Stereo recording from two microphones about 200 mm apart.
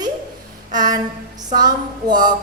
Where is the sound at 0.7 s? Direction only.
20° right (ahead or behind).